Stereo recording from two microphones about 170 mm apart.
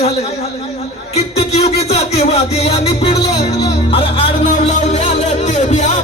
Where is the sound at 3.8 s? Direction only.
30° left (ahead or behind).